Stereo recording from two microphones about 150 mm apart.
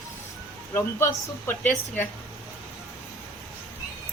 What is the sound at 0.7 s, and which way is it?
Speech, 15° left (ahead or behind).